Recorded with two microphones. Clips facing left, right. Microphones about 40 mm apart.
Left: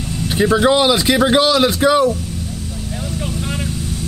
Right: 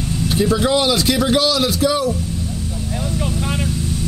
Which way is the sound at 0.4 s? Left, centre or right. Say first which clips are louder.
Left 4 dB; left.